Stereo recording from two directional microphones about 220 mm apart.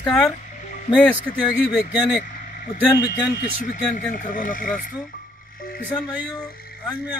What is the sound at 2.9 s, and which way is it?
Speech, 15° left (ahead or behind).